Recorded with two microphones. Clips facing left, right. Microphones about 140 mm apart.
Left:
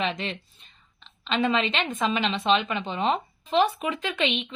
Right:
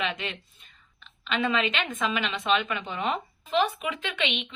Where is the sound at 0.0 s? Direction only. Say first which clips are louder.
Left 3 dB; 35° left (ahead or behind).